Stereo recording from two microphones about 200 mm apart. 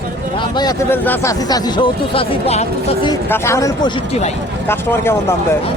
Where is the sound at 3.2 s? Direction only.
10° left (ahead or behind).